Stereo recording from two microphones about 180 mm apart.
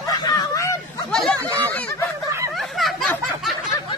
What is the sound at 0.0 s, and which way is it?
Hubbub, 20° left (ahead or behind).